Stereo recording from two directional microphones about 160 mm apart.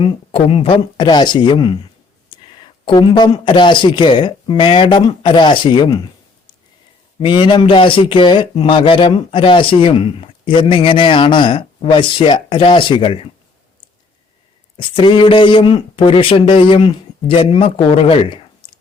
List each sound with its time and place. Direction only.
0.0 s speech: 35° left (ahead or behind)
7.2 s speech: 30° left (ahead or behind)
14.8 s speech: 30° left (ahead or behind)
18.6 s whispering: 30° left (ahead or behind)